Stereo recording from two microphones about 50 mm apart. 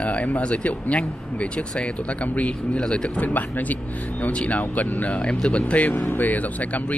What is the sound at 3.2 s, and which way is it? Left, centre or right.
Speech, left.